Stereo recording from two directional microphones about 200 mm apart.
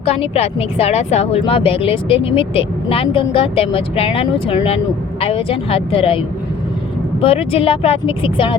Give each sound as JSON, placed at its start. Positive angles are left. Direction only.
{"t": 0.0, "sound": "speech", "side_deg": 30}
{"t": 7.2, "sound": "speech", "side_deg": 30}